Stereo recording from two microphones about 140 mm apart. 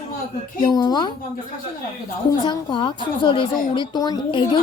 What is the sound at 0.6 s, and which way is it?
Speech, 30° left (ahead or behind).